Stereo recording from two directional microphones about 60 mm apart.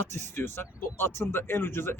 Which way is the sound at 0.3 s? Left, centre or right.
Left.